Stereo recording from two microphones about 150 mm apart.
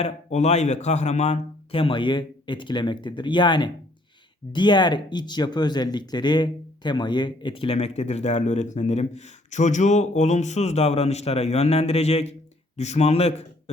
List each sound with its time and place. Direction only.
0.0 s a man's voice: 50° left (ahead or behind)